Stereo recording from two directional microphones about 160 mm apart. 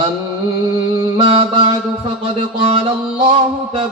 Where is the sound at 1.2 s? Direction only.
35° right (ahead or behind).